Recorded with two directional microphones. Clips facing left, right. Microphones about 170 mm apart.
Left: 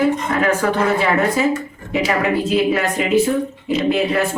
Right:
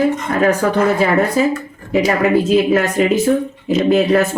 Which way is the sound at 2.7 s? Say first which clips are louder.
Right 3 dB; 45° right (ahead or behind).